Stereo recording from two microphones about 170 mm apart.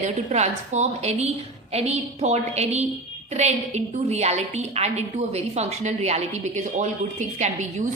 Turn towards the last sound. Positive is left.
turn(degrees=-45)  # may be behind; listen again after turning